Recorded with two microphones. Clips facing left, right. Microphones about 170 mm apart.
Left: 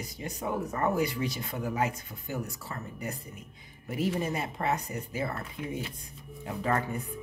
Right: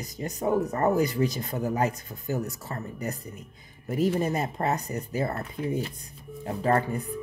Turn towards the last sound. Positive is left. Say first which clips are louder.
# right 5 dB
turn(degrees=-35)  # may be behind; listen again after turning